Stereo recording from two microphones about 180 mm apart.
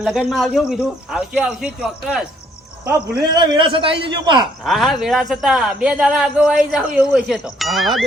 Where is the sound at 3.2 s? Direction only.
25° right (ahead or behind).